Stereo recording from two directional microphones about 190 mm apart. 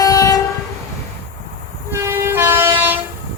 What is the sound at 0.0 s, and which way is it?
Train, 20° left (ahead or behind).